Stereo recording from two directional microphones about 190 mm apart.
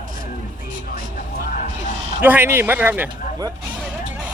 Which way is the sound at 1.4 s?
45° left (ahead or behind).